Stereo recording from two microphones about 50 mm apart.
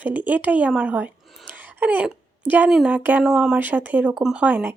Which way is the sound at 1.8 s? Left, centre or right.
Right.